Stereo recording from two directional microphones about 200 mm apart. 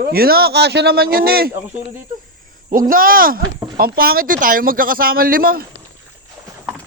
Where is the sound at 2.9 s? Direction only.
45° right (ahead or behind).